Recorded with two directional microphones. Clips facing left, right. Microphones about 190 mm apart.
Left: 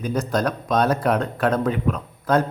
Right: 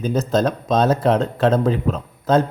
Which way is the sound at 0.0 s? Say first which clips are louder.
Right 4 dB; 25° right (ahead or behind).